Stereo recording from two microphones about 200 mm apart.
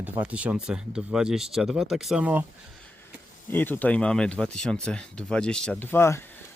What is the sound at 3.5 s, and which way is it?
Speech, 10° left (ahead or behind).